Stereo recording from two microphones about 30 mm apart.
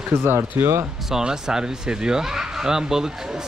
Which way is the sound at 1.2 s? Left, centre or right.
Right.